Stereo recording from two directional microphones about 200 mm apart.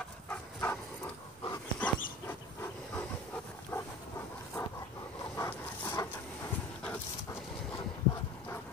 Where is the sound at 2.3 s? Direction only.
10° left (ahead or behind).